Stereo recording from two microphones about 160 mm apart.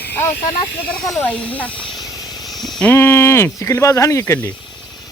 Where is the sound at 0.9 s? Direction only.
5° left (ahead or behind).